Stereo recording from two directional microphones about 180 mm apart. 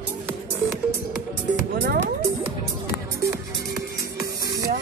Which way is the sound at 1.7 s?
55° right (ahead or behind).